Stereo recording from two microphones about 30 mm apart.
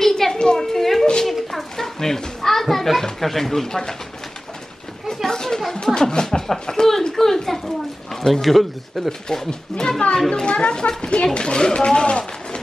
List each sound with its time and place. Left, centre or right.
0.0 s a sound: centre
1.2 s children playing: centre
3.0 s speech: centre
5.0 s chatter: centre
5.9 s speech: left
6.7 s children playing: centre
8.3 s speech: centre
9.5 s speech: left